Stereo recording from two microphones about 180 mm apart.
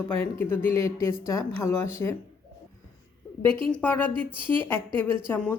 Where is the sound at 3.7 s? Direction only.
10° left (ahead or behind).